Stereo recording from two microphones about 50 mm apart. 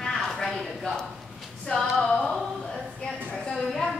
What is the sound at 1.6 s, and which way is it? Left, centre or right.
Female singing, centre.